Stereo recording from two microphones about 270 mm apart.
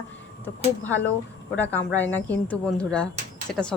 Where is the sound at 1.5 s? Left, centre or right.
Centre.